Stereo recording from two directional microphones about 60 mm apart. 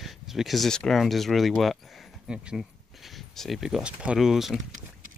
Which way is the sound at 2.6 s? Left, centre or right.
Centre.